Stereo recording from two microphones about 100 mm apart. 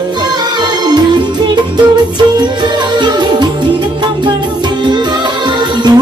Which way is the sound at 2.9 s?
45° right (ahead or behind).